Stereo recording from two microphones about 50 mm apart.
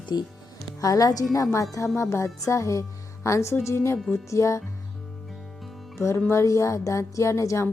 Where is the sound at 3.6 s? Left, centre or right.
Left.